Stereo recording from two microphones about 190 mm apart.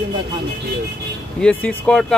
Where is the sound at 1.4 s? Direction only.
5° left (ahead or behind).